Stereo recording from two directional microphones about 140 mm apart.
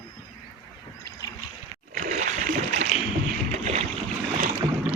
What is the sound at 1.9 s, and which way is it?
Splash, 65° right (ahead or behind).